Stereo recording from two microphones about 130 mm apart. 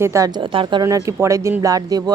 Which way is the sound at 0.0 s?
20° right (ahead or behind).